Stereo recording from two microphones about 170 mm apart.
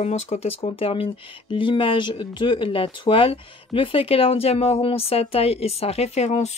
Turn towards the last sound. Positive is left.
turn(degrees=40)  # may be behind; listen again after turning